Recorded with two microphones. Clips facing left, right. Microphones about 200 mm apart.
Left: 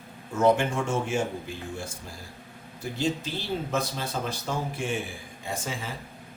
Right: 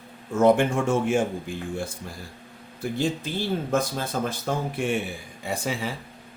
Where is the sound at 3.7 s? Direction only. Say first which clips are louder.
Right 4 dB; 50° right (ahead or behind).